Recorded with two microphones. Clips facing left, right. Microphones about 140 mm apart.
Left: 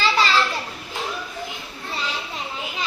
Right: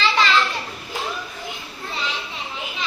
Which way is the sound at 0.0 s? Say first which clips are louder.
Even; 35° left (ahead or behind).